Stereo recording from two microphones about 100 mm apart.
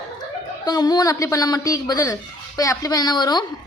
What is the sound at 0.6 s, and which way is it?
A woman's voice, 40° left (ahead or behind).